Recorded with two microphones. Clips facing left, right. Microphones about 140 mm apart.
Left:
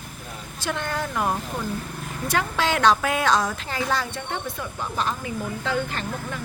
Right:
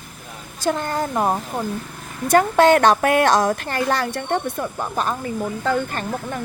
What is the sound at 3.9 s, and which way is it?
Speech, 65° right (ahead or behind).